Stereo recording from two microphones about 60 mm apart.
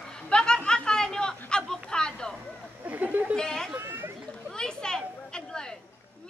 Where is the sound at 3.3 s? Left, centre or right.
Centre.